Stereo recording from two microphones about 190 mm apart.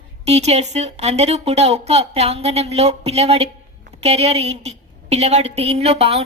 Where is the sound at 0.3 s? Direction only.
35° right (ahead or behind).